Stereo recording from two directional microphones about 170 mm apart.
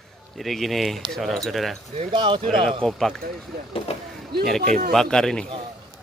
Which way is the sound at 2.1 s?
30° right (ahead or behind).